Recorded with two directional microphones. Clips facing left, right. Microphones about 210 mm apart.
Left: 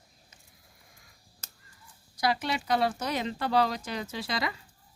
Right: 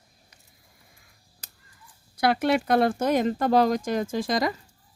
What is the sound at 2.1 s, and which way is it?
Speech, 60° right (ahead or behind).